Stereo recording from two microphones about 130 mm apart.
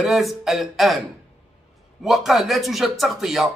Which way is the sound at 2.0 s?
Centre (ahead or behind).